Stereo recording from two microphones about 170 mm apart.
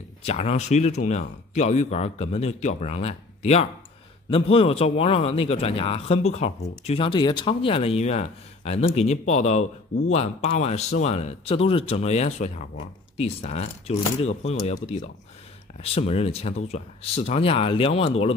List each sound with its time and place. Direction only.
0.2 s a man's voice: 35° left (ahead or behind)